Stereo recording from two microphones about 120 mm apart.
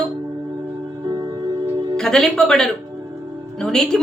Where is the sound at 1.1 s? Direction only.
30° right (ahead or behind).